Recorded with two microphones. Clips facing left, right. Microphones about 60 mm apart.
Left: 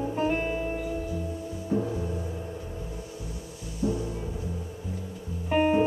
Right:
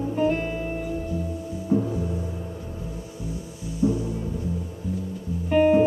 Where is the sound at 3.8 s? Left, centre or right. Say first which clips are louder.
Right 5 dB; centre.